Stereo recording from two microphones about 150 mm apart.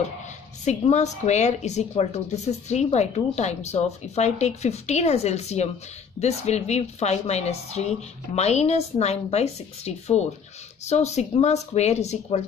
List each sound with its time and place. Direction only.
0.7 s speech: 50° left (ahead or behind)